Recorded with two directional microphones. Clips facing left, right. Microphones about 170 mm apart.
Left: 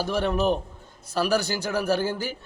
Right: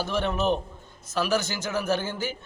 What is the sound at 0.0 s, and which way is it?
A man's voice, 35° left (ahead or behind).